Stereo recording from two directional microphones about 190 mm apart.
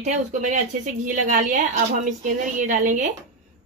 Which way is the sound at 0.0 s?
40° right (ahead or behind).